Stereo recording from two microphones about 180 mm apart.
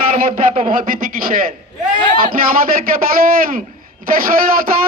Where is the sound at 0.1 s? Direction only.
45° right (ahead or behind).